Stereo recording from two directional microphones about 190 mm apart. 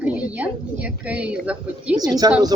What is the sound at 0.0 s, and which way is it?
A woman's voice, 5° right (ahead or behind).